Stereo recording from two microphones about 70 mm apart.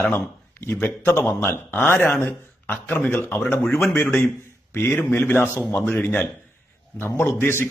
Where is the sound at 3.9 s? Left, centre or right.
Left.